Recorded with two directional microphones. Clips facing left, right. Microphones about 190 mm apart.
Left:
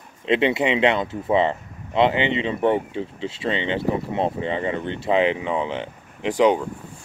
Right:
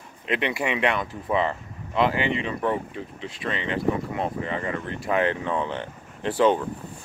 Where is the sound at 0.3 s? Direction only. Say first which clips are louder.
Left 6 dB; 25° left (ahead or behind).